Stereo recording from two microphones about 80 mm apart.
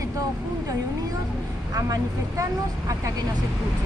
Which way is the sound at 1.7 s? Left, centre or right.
Right.